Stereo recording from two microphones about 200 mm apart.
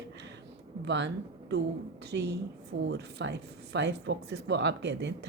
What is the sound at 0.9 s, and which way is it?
Speech, 60° right (ahead or behind).